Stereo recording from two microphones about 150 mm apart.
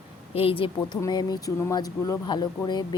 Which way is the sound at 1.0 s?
30° left (ahead or behind).